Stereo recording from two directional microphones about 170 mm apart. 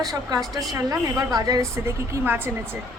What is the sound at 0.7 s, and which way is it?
A woman's voice, 20° right (ahead or behind).